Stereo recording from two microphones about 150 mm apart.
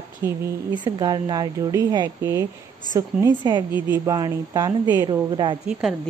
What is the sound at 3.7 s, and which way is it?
A woman's voice, 15° right (ahead or behind).